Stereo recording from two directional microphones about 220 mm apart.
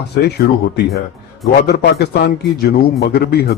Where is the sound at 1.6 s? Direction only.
50° left (ahead or behind).